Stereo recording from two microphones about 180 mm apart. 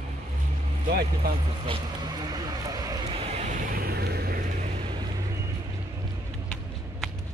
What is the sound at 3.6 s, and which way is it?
Vehicle, 55° right (ahead or behind).